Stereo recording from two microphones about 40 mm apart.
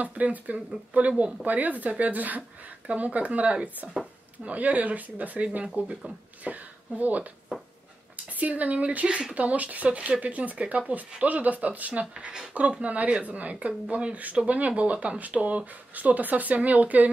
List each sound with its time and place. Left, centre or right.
0.0 s speech: right
4.5 s speech: right
8.3 s speech: right
9.4 s speech: right